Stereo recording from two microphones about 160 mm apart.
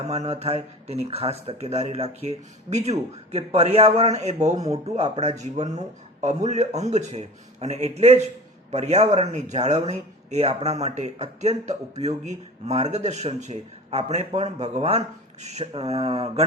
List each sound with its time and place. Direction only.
0.0 s speech: 40° right (ahead or behind)